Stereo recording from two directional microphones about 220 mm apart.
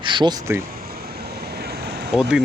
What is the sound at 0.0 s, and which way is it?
Speech, 20° right (ahead or behind).